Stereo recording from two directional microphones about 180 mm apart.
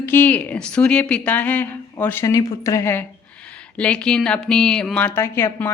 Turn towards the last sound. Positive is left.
turn(degrees=15)  # may be behind; listen again after turning